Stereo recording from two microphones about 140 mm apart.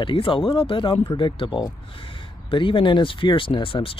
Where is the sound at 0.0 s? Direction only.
35° left (ahead or behind).